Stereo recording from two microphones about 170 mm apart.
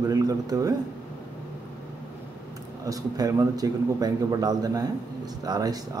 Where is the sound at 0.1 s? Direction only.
20° right (ahead or behind).